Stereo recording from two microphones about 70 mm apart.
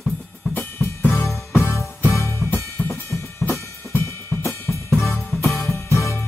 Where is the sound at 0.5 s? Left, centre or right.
Left.